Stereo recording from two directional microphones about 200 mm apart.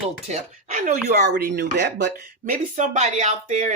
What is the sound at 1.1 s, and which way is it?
Speech, 55° right (ahead or behind).